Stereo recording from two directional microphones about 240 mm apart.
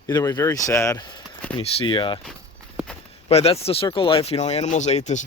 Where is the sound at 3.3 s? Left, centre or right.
Left.